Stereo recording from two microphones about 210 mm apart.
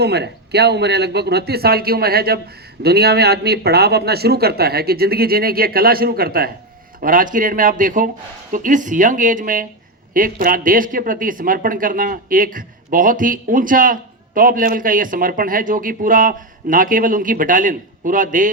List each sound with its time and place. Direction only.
0.0 s speech: 50° right (ahead or behind)